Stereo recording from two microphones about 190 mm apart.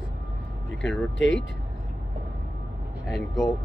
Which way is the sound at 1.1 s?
75° left (ahead or behind).